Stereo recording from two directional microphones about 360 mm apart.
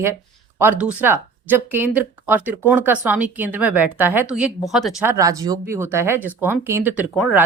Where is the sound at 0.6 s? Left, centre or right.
Centre.